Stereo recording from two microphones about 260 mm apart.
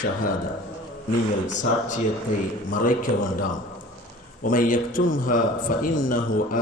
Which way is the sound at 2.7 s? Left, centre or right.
Left.